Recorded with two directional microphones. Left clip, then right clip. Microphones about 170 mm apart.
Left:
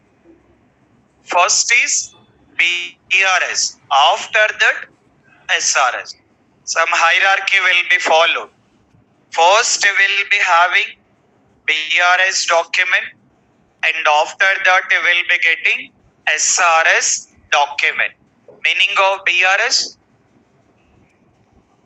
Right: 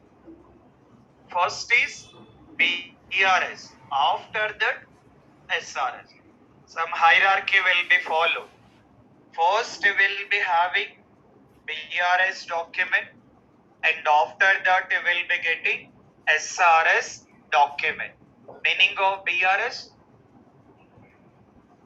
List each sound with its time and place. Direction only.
1.3 s speech: 60° left (ahead or behind)